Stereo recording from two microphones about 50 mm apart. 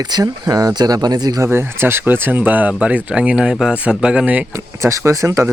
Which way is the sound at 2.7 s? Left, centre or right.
Right.